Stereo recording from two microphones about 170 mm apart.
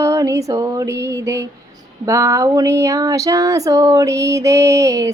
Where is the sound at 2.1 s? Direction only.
20° right (ahead or behind).